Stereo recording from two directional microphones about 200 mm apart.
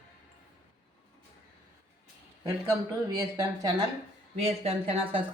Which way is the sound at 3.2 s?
15° right (ahead or behind).